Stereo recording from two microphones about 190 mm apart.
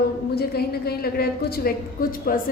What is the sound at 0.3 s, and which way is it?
A woman's voice, 55° left (ahead or behind).